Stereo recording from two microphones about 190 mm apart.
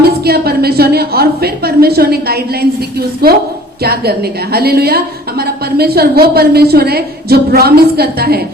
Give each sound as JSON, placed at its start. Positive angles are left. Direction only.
{"t": 0.3, "sound": "a woman's voice", "side_deg": -55}
{"t": 4.5, "sound": "a woman's voice", "side_deg": -55}